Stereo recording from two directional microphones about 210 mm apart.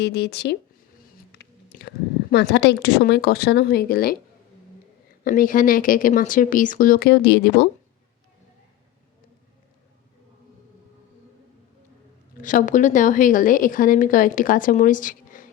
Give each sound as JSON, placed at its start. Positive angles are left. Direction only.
{"t": 0.0, "sound": "a woman's voice", "side_deg": 50}
{"t": 1.3, "sound": "whispering", "side_deg": 50}
{"t": 2.3, "sound": "a woman's voice", "side_deg": 50}
{"t": 5.2, "sound": "speech", "side_deg": 40}
{"t": 12.4, "sound": "speech", "side_deg": 40}